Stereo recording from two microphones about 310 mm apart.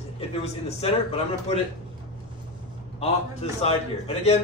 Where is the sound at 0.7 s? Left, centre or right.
Centre.